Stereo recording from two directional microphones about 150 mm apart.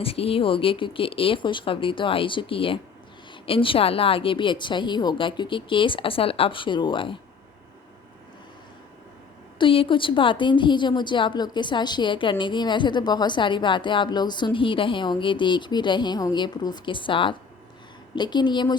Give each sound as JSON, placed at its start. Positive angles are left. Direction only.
{"t": 0.0, "sound": "a woman's voice", "side_deg": 40}
{"t": 9.6, "sound": "a woman's voice", "side_deg": 35}